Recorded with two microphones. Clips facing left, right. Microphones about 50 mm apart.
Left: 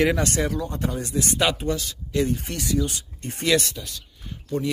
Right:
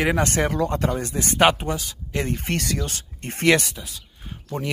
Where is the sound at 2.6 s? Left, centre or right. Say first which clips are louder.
Left 3 dB; right.